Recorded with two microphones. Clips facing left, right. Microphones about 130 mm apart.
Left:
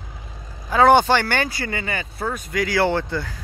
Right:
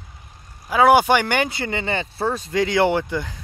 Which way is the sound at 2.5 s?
25° right (ahead or behind).